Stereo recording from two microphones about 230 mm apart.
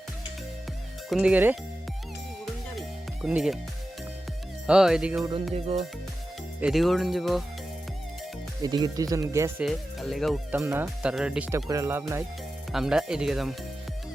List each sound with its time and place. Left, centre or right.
1.1 s speech: centre
2.7 s music: centre
4.6 s speech: centre
5.5 s music: right
6.6 s speech: centre
8.6 s speech: centre
9.6 s speech: centre